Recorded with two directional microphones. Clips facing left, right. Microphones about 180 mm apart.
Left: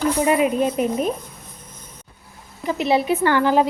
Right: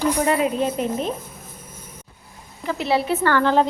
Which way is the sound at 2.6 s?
15° left (ahead or behind).